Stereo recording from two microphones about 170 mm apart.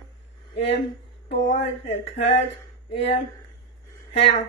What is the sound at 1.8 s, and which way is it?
Speech, 40° left (ahead or behind).